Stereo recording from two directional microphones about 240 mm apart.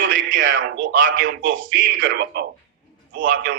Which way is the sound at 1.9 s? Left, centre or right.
Right.